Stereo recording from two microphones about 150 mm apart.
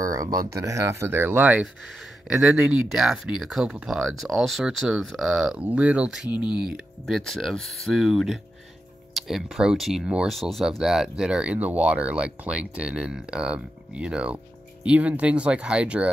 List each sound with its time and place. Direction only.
0.0 s speech: 25° right (ahead or behind); by 16.1 s 5° right (ahead or behind)